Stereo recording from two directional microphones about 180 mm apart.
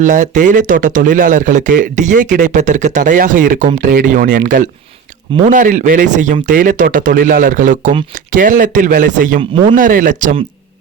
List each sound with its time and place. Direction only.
0.0 s speech: 45° right (ahead or behind)